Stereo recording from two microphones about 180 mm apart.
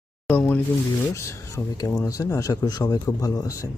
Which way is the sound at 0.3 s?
10° left (ahead or behind).